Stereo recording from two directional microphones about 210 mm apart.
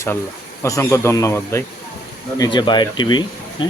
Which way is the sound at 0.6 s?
15° left (ahead or behind).